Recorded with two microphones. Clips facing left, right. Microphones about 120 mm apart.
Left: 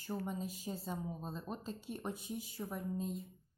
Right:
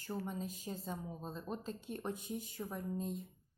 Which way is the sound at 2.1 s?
50° right (ahead or behind).